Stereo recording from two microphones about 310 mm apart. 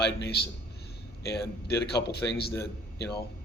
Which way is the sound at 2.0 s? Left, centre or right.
Left.